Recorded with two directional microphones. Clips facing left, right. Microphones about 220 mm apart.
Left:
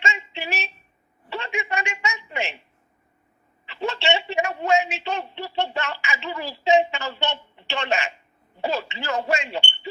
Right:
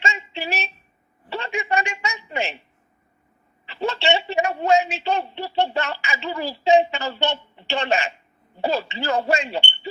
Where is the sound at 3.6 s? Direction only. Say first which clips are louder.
Right 2 dB; 35° right (ahead or behind).